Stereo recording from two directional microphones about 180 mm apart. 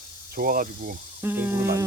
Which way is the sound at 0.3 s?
50° right (ahead or behind).